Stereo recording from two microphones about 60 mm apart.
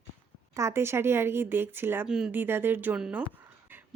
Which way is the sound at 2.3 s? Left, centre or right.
Right.